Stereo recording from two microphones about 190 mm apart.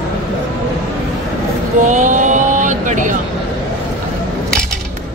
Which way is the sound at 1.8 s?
40° right (ahead or behind).